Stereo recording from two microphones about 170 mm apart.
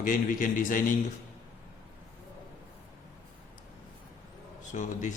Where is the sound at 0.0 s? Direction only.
55° left (ahead or behind).